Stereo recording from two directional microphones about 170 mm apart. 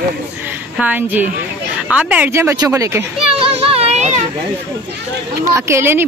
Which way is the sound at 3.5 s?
35° right (ahead or behind).